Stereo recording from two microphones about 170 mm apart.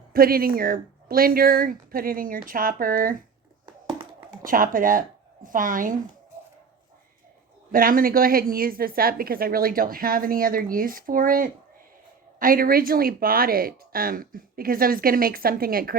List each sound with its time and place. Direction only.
0.1 s a woman's voice: 60° right (ahead or behind)
4.4 s speech: 55° right (ahead or behind)
7.7 s a woman's voice: 55° right (ahead or behind)